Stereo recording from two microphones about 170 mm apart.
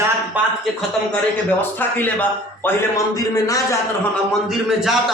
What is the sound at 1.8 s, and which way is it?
A man's voice, 10° left (ahead or behind).